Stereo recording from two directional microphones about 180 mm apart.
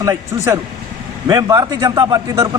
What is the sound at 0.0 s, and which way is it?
Speech, 20° right (ahead or behind).